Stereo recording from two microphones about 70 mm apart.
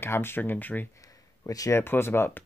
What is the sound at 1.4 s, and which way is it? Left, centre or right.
Speech, left.